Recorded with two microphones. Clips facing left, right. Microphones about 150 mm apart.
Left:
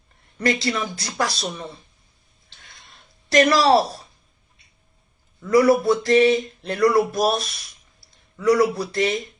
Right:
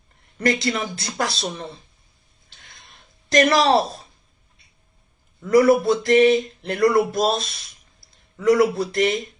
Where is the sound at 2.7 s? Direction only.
25° right (ahead or behind).